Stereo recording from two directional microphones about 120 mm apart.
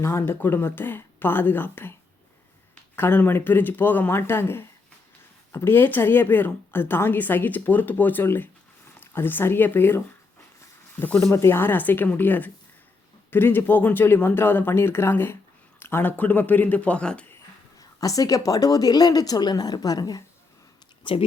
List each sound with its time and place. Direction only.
0.0 s a woman's voice: 25° left (ahead or behind)
17.7 s a woman's voice: 30° left (ahead or behind)
21.0 s speech: 45° left (ahead or behind)